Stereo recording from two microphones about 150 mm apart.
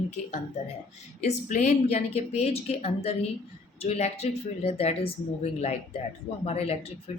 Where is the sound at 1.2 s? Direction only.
50° left (ahead or behind).